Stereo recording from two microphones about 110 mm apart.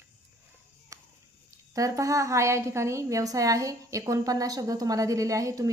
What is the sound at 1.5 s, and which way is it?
A woman's voice, 30° right (ahead or behind).